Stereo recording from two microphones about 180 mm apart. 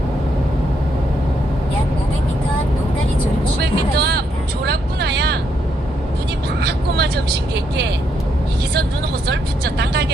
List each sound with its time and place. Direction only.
3.6 s vehicle: 65° right (ahead or behind)
6.6 s vehicle: 65° right (ahead or behind)
9.2 s speech: 65° right (ahead or behind)